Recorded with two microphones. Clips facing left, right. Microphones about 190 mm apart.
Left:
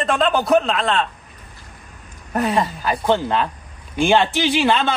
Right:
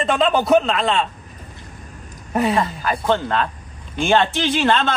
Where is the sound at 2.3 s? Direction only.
Centre (ahead or behind).